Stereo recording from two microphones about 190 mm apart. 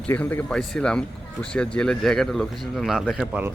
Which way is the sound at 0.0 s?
5° left (ahead or behind).